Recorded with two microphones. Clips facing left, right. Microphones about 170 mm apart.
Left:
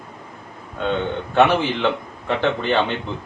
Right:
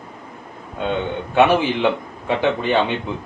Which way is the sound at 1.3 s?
10° right (ahead or behind).